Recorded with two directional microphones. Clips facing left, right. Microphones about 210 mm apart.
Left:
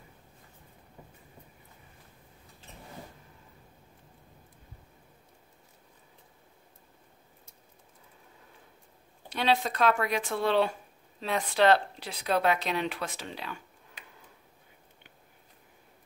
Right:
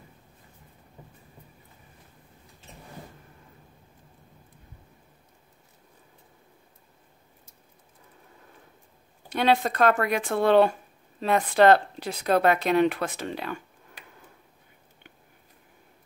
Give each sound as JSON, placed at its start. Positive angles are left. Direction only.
{"t": 9.3, "sound": "speech", "side_deg": -55}